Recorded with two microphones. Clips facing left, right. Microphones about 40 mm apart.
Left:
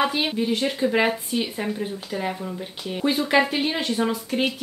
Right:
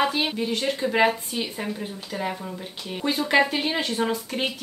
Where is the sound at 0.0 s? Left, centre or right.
Centre.